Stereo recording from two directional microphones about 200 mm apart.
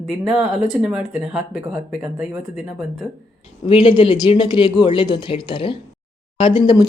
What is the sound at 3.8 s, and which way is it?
Speech, 25° left (ahead or behind).